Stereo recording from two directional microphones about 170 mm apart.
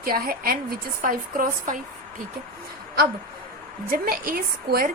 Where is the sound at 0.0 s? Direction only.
60° right (ahead or behind).